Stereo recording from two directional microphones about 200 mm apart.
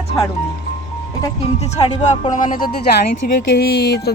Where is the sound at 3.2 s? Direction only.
50° left (ahead or behind).